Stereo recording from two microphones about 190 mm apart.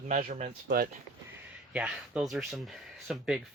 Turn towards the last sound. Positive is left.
turn(degrees=0)  # may be behind; listen again after turning